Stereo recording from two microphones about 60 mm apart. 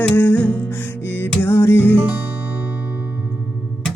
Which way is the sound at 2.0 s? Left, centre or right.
Right.